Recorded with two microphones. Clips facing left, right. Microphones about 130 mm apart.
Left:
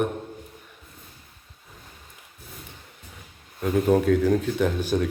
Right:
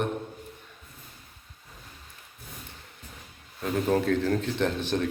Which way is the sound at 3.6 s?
5° left (ahead or behind).